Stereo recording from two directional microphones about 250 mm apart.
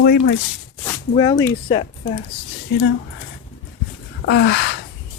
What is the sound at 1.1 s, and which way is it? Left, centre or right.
Speech, centre.